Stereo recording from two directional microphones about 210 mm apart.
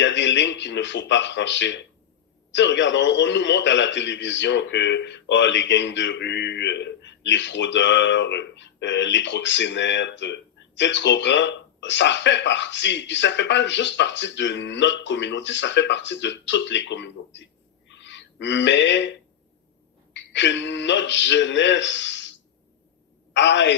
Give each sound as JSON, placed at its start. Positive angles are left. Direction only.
{"t": 0.0, "sound": "a man's voice", "side_deg": 60}
{"t": 17.9, "sound": "a sound", "side_deg": 60}
{"t": 20.1, "sound": "a man's voice", "side_deg": 55}
{"t": 23.3, "sound": "a man's voice", "side_deg": 55}